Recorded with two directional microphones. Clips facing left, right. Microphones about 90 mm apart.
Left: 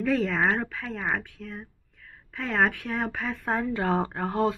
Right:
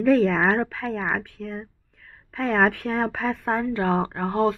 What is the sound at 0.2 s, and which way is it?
A woman's voice, 25° right (ahead or behind).